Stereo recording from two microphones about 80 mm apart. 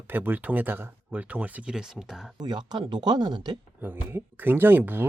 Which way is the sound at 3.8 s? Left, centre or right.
Right.